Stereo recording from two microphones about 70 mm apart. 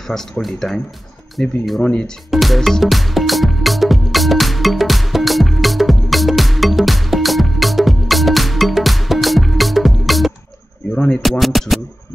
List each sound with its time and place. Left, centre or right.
0.1 s speech: centre
1.4 s speech: centre
2.3 s music: centre
11.0 s a sound: centre
11.2 s speech: centre